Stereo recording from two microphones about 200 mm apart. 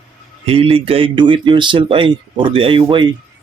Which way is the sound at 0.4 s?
30° right (ahead or behind).